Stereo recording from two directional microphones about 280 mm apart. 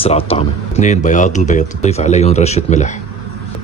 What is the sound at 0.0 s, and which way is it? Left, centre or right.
Speech, left.